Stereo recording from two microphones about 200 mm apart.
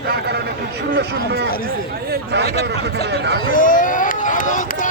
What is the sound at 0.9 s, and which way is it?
Speech, 55° right (ahead or behind).